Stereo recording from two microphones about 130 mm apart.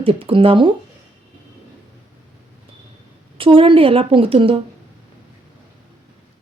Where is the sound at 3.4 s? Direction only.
40° right (ahead or behind).